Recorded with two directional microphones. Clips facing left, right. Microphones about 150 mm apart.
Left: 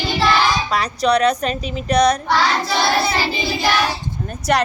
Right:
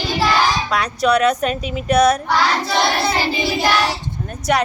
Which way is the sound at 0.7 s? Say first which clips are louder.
Even; centre (ahead or behind).